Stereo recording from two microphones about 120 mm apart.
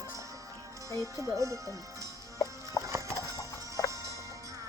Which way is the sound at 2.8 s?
25° right (ahead or behind).